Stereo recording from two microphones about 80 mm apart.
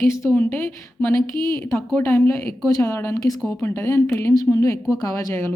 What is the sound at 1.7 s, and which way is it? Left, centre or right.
Speech, left.